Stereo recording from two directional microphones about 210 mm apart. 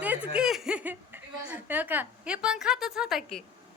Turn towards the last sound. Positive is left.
turn(degrees=0)  # may be behind; listen again after turning